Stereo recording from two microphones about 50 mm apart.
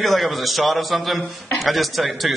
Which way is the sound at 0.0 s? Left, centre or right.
Centre.